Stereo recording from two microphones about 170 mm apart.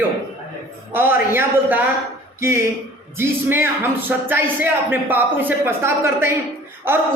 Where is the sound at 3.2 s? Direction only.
15° right (ahead or behind).